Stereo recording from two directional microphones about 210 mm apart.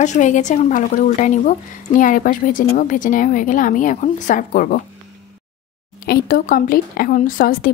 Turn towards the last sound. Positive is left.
turn(degrees=45)  # may be behind; listen again after turning